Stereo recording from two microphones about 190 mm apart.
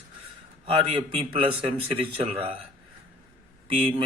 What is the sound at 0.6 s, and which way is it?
Speech, 30° right (ahead or behind).